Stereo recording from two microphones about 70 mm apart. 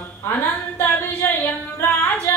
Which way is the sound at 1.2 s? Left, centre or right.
Left.